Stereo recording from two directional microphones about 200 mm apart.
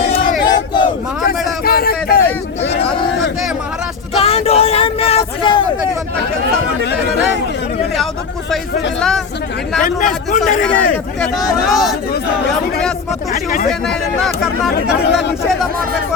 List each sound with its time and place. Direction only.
0.4 s battle cry: 20° left (ahead or behind)
1.6 s a sound: 50° left (ahead or behind)
4.2 s a sound: 30° left (ahead or behind)
9.0 s speech: centre (ahead or behind)
9.8 s a man's voice: 40° left (ahead or behind)
10.9 s speech: centre (ahead or behind)
13.3 s speech: 45° left (ahead or behind)
13.8 s speech: centre (ahead or behind)
15.0 s speech: 60° left (ahead or behind)